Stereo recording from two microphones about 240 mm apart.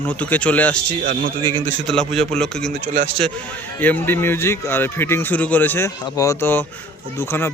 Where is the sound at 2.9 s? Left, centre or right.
Right.